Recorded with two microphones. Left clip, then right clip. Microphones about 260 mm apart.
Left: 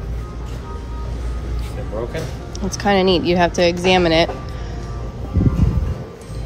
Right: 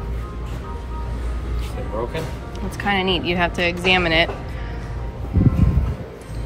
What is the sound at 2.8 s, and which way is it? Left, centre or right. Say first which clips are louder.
Speech: left 5 dB; centre.